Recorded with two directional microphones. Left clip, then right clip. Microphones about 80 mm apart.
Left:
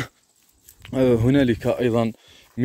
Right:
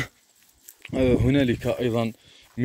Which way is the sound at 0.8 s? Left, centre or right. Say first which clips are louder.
Left 3 dB; left.